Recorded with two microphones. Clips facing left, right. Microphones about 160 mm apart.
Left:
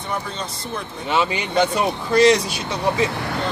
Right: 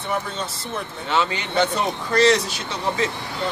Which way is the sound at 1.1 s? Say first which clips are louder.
Left 2 dB; 15° left (ahead or behind).